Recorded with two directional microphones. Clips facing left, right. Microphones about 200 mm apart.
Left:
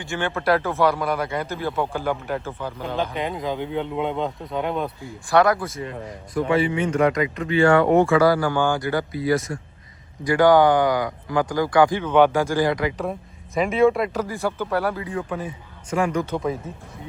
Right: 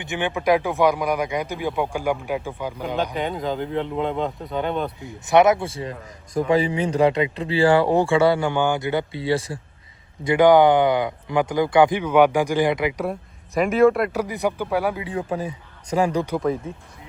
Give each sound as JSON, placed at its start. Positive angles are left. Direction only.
{"t": 0.0, "sound": "speech", "side_deg": -20}
{"t": 2.9, "sound": "speech", "side_deg": 0}
{"t": 5.2, "sound": "speech", "side_deg": -20}
{"t": 10.2, "sound": "speech", "side_deg": -20}
{"t": 13.6, "sound": "speech", "side_deg": 0}
{"t": 15.1, "sound": "speech", "side_deg": -35}